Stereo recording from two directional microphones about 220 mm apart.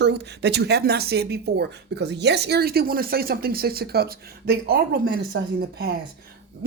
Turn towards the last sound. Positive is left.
turn(degrees=-45)  # may be behind; listen again after turning